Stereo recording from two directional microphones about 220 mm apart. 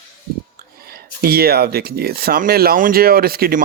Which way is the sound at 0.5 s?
45° right (ahead or behind).